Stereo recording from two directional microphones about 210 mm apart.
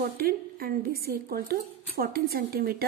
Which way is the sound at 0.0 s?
45° right (ahead or behind).